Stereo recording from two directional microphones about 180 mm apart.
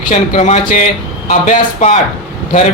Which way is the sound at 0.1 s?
40° left (ahead or behind).